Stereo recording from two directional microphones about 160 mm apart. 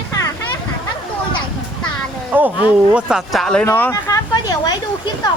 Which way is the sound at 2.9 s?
5° right (ahead or behind).